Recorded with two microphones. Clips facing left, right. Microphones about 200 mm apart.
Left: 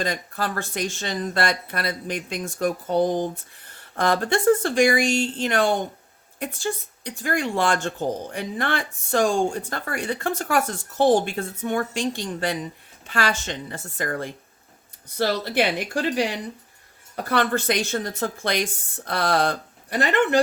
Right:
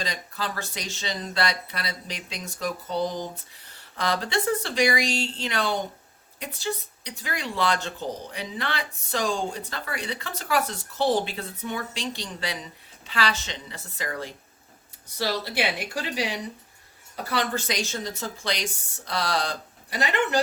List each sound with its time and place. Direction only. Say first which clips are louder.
0.0 s a woman's voice: left 5 dB; 50° left (ahead or behind)